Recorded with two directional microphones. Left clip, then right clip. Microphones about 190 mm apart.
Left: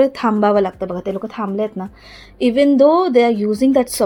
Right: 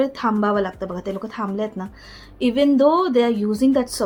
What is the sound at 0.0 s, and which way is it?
Speech, 25° left (ahead or behind).